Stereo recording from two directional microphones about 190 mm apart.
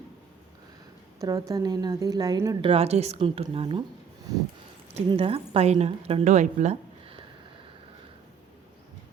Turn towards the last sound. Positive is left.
turn(degrees=-35)  # may be behind; listen again after turning